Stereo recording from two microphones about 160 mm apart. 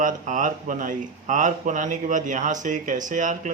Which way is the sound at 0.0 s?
55° right (ahead or behind).